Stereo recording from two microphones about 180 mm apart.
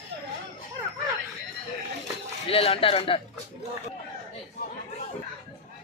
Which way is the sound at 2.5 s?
30° left (ahead or behind).